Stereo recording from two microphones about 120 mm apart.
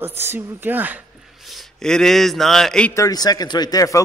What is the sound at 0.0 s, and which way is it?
A woman's voice, 20° right (ahead or behind).